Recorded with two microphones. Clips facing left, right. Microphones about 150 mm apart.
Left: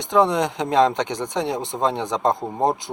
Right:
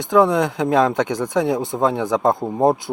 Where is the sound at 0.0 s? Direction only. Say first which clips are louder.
Right 3 dB; 20° left (ahead or behind).